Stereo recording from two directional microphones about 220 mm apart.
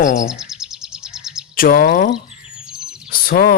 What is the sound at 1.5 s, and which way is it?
Speech, 40° left (ahead or behind).